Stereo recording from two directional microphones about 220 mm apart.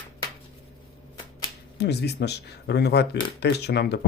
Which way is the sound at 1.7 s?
50° left (ahead or behind).